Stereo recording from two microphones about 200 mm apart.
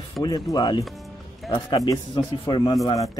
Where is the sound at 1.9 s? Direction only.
25° left (ahead or behind).